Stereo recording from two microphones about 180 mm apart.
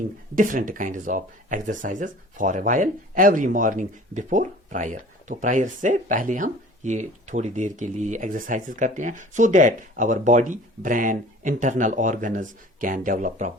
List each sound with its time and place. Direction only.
0.3 s speech: 50° right (ahead or behind)